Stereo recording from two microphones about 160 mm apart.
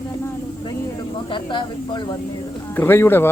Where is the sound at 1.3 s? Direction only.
30° left (ahead or behind).